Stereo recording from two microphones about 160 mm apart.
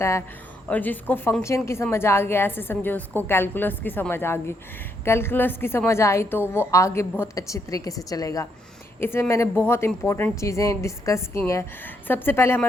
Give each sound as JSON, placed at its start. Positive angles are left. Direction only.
{"t": 0.0, "sound": "a woman's voice", "side_deg": 15}